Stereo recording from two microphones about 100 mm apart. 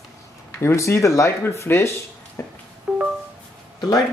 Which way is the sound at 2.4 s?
25° left (ahead or behind).